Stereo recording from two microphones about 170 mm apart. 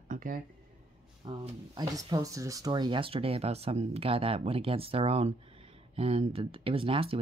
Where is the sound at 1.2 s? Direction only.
25° right (ahead or behind).